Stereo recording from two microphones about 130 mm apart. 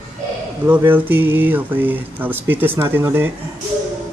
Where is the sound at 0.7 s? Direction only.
15° right (ahead or behind).